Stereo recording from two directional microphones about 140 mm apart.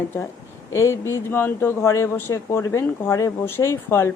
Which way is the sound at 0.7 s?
20° left (ahead or behind).